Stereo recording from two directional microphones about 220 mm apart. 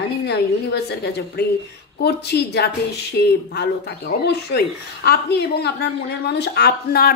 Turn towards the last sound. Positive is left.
turn(degrees=45)  # may be behind; listen again after turning